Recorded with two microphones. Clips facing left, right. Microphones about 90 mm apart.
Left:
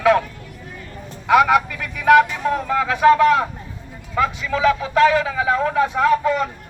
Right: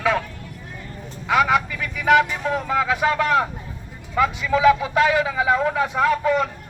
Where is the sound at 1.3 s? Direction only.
55° left (ahead or behind).